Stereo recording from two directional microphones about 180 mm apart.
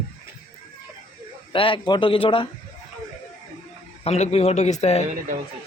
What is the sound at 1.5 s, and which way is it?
Speech, 30° left (ahead or behind).